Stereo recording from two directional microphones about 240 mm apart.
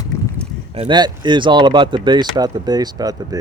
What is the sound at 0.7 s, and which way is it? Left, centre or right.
Speech, right.